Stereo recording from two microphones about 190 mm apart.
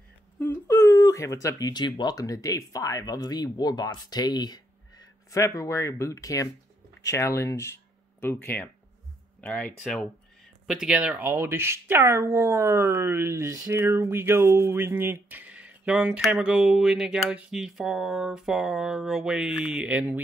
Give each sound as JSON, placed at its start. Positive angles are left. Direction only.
{"t": 0.4, "sound": "speech", "side_deg": 10}